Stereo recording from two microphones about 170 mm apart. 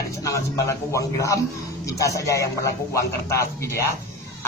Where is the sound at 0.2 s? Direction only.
20° left (ahead or behind).